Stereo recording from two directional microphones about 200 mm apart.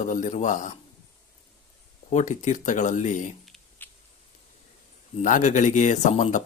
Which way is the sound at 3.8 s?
10° left (ahead or behind).